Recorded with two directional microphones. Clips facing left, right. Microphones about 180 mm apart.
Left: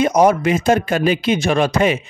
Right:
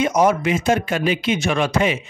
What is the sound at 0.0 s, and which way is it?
Speech, 35° left (ahead or behind).